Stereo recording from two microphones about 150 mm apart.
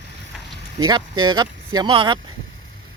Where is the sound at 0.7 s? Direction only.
30° right (ahead or behind).